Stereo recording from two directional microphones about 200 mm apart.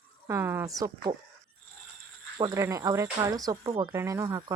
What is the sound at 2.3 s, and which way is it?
Speech, 20° right (ahead or behind).